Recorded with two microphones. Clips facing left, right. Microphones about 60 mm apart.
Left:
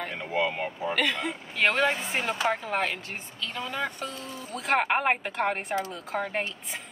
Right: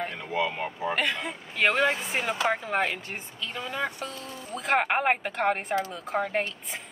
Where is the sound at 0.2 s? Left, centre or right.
Centre.